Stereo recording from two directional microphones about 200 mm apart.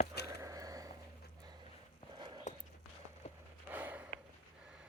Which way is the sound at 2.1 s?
20° right (ahead or behind).